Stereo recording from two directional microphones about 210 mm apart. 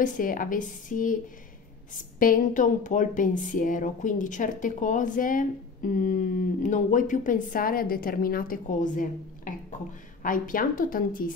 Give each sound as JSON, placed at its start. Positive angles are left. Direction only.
{"t": 0.0, "sound": "speech", "side_deg": 40}
{"t": 2.1, "sound": "speech", "side_deg": 40}